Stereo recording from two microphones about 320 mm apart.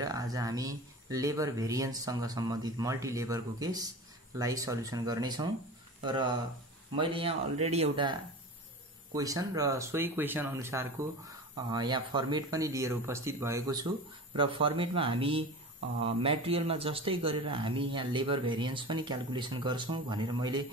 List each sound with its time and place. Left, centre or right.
0.0 s a man's voice: centre